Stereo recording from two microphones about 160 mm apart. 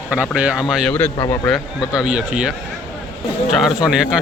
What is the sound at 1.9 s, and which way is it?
Speech, 5° right (ahead or behind).